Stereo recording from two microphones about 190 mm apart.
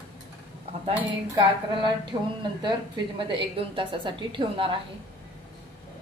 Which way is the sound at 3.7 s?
25° right (ahead or behind).